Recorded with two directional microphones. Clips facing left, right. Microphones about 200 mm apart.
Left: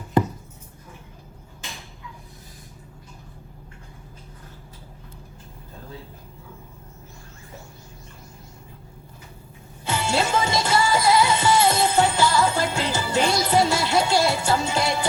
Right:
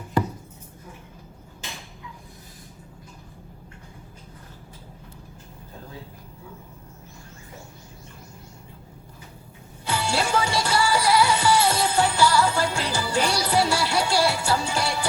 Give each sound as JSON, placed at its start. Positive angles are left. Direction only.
{"t": 9.8, "sound": "music", "side_deg": 20}